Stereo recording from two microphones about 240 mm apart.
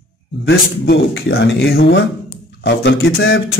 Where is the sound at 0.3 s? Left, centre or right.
Left.